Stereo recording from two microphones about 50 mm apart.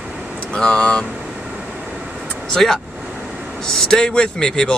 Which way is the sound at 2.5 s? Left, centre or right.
Centre.